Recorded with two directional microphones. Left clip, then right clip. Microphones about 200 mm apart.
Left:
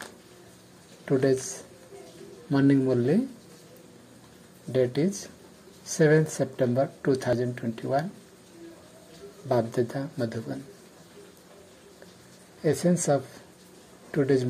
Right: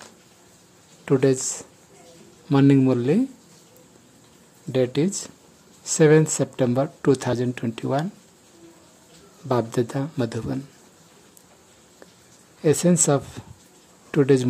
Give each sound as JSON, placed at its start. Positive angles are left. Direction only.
{"t": 1.0, "sound": "speech", "side_deg": -25}
{"t": 4.7, "sound": "speech", "side_deg": -20}
{"t": 9.5, "sound": "speech", "side_deg": -25}
{"t": 12.6, "sound": "speech", "side_deg": -25}